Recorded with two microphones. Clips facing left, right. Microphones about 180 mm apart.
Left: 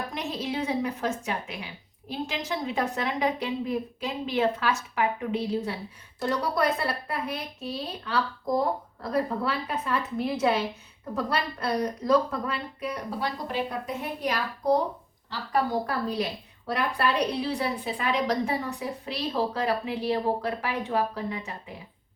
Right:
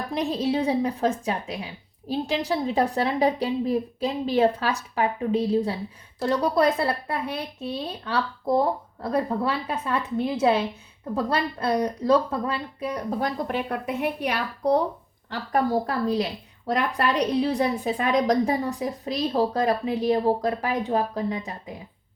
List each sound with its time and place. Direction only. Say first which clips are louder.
0.1 s a woman's voice: right 7 dB; 35° right (ahead or behind)
13.1 s a woman's voice: right 3 dB; 50° right (ahead or behind)
15.7 s a woman's voice: right 4 dB; 35° right (ahead or behind)
17.4 s a woman's voice: right 5 dB; 45° right (ahead or behind)